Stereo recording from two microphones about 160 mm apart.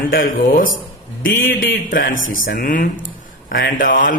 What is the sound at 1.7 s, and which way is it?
Speech, 60° left (ahead or behind).